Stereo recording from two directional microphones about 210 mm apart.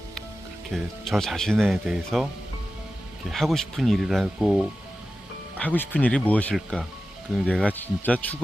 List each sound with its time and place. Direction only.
0.7 s speech: centre (ahead or behind)
3.2 s speech: centre (ahead or behind)